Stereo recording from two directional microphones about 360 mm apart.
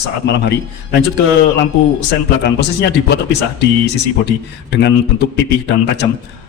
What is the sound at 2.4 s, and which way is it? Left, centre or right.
A man's voice, left.